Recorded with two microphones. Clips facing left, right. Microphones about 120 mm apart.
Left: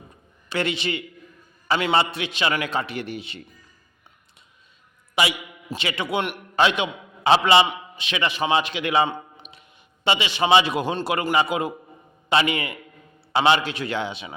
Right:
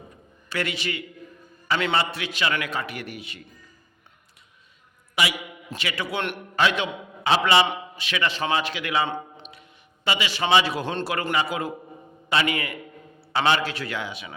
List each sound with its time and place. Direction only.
0.5 s a man's voice: 25° left (ahead or behind)
5.1 s a man's voice: 25° left (ahead or behind)